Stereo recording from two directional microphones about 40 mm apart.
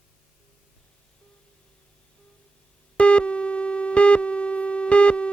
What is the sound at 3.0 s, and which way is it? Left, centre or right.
Busy signal, left.